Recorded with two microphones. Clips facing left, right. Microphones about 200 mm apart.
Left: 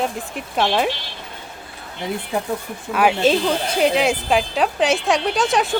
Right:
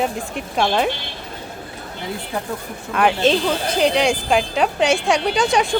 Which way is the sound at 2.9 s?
5° left (ahead or behind).